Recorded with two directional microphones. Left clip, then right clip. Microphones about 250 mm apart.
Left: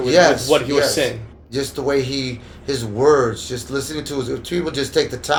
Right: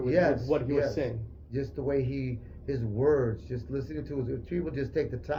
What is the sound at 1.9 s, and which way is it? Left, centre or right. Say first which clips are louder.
Speech: left 11 dB; left.